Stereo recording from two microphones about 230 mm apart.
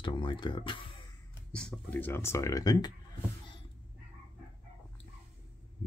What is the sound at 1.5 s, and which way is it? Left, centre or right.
Speech, centre.